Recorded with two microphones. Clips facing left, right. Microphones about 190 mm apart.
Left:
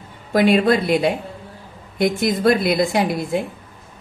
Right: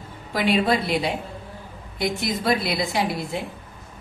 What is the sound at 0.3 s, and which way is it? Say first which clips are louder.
A woman's voice: left 6 dB; 50° left (ahead or behind).